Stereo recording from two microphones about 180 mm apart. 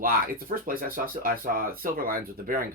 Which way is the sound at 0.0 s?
55° right (ahead or behind).